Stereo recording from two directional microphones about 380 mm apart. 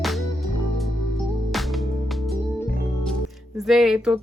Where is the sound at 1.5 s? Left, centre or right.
Centre.